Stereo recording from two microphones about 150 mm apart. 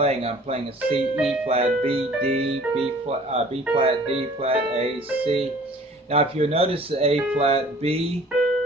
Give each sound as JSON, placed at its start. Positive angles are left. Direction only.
{"t": 0.0, "sound": "speech", "side_deg": -45}
{"t": 1.1, "sound": "speech", "side_deg": -5}
{"t": 1.5, "sound": "speech", "side_deg": -45}